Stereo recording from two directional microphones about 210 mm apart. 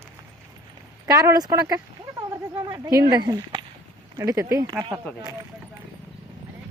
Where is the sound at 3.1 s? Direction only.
20° right (ahead or behind).